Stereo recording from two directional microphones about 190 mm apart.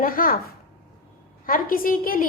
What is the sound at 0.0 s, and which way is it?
Speech, 50° left (ahead or behind).